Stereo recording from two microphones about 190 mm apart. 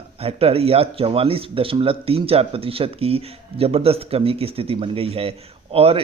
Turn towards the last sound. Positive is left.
turn(degrees=-30)  # may be behind; listen again after turning